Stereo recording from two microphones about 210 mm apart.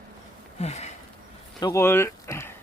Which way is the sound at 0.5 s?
30° left (ahead or behind).